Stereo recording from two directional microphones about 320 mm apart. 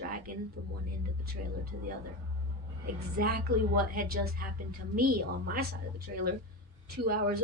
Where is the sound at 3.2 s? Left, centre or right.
Right.